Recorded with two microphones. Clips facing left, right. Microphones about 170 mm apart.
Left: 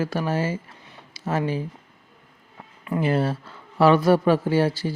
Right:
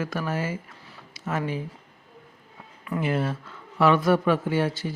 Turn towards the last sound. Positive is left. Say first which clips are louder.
# left 4 dB
turn(degrees=35)  # may be behind; listen again after turning